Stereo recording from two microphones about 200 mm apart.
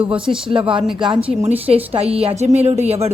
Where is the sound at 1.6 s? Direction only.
30° right (ahead or behind).